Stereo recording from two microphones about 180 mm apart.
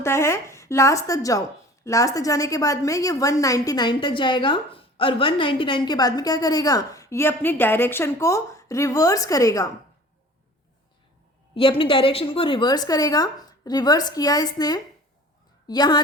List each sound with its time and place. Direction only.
0.0 s a woman's voice: 15° left (ahead or behind)
11.5 s a woman's voice: 30° left (ahead or behind)